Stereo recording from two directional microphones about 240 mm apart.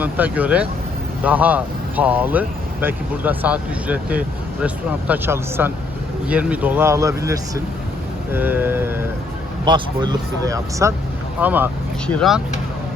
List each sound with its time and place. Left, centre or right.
0.0 s speech: centre